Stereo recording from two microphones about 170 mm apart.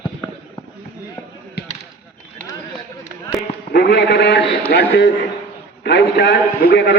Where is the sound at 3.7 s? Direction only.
90° left.